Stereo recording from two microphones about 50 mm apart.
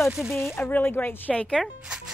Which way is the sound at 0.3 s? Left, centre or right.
Centre.